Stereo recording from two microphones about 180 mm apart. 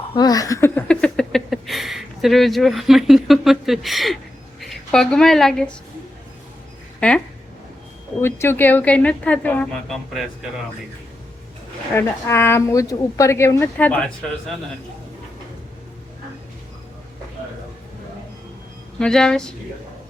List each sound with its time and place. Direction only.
0.1 s a woman's voice: 20° left (ahead or behind); by 5.6 s centre (ahead or behind)
7.0 s a woman's voice: 5° left (ahead or behind)
8.2 s a woman's voice: 15° left (ahead or behind)
11.9 s a woman's voice: 15° left (ahead or behind)
18.9 s speech: 5° left (ahead or behind)